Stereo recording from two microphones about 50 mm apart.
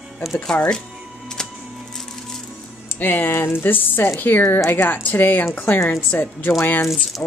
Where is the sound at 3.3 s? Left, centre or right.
Left.